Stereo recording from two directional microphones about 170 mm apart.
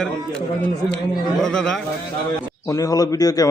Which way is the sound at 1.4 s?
5° left (ahead or behind).